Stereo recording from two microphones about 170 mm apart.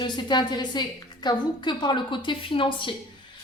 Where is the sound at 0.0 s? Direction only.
25° left (ahead or behind).